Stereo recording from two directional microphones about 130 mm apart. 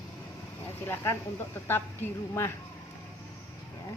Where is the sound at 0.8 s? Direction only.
20° left (ahead or behind).